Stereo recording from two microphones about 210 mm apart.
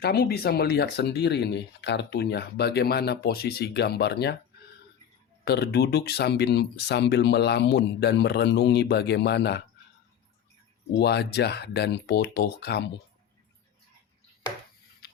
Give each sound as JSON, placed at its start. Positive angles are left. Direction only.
{"t": 0.0, "sound": "speech", "side_deg": 50}
{"t": 5.5, "sound": "speech", "side_deg": 50}
{"t": 10.9, "sound": "speech", "side_deg": 50}